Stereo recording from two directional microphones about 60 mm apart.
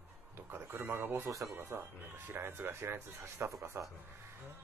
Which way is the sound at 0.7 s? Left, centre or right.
Right.